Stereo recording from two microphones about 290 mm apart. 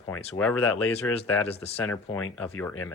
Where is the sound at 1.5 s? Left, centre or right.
Left.